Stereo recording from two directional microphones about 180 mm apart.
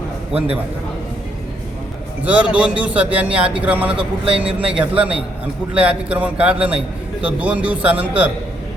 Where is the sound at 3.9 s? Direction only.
30° right (ahead or behind).